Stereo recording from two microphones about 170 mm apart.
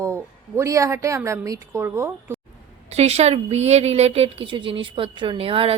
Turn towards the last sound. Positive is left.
turn(degrees=-35)  # may be behind; listen again after turning